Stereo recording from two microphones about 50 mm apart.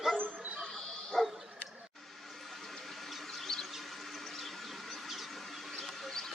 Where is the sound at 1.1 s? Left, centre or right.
Centre.